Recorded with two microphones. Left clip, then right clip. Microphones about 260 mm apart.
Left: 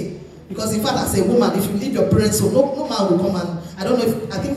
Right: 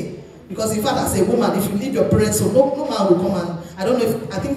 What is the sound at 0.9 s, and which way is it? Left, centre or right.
A man's voice, left.